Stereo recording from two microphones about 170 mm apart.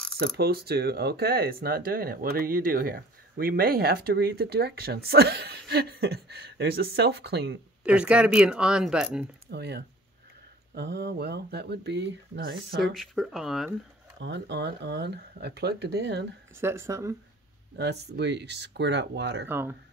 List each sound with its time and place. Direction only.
0.2 s speech: 65° right (ahead or behind)
7.8 s speech: 5° right (ahead or behind)
9.5 s speech: 80° right
12.8 s speech: centre (ahead or behind)
14.2 s speech: 90° right
16.5 s speech: 15° right (ahead or behind)
17.7 s speech: 80° right
19.4 s speech: 10° right (ahead or behind)